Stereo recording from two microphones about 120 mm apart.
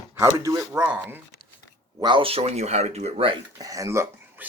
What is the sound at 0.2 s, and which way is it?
Speech, 25° right (ahead or behind).